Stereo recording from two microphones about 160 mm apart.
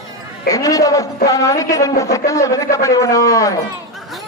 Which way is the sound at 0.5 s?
20° left (ahead or behind).